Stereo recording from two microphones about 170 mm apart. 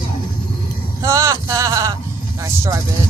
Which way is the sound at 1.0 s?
15° right (ahead or behind).